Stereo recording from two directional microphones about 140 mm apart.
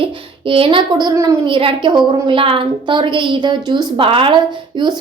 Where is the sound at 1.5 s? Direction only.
40° right (ahead or behind).